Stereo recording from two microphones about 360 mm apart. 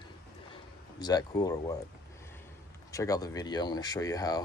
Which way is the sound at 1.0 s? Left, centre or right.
Centre.